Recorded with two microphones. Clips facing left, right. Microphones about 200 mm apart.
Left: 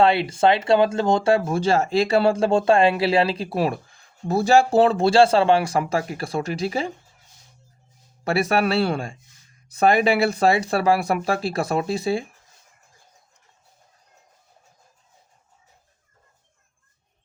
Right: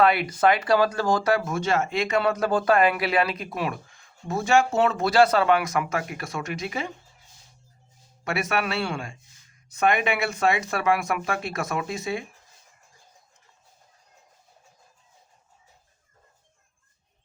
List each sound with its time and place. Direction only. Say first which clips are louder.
0.0 s speech: left 3 dB; 25° left (ahead or behind)
8.2 s speech: left 6 dB; 35° left (ahead or behind)